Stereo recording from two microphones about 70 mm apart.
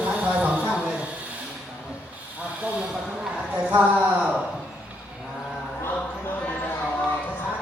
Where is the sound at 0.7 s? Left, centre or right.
Centre.